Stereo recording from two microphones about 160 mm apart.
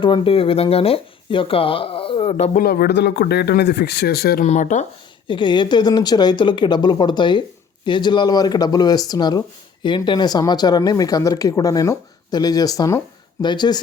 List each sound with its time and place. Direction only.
0.0 s speech: 35° left (ahead or behind)
2.6 s speech: 70° left (ahead or behind)
4.4 s speech: 50° left (ahead or behind)
5.3 s speech: 30° left (ahead or behind)